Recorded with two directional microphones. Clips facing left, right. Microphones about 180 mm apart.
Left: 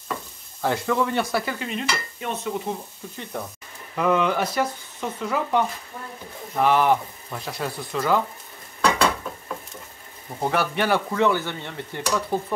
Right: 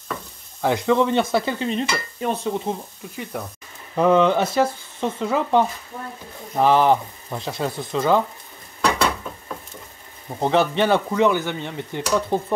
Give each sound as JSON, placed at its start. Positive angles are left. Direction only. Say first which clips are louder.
{"t": 0.6, "sound": "speech", "louder": "right 4 dB", "side_deg": -15}
{"t": 1.3, "sound": "stir", "louder": "right 5 dB", "side_deg": -25}
{"t": 3.3, "sound": "speech", "louder": "right 1 dB", "side_deg": -5}
{"t": 3.9, "sound": "speech", "louder": "right 5 dB", "side_deg": -30}
{"t": 10.4, "sound": "speech", "louder": "right 5 dB", "side_deg": -25}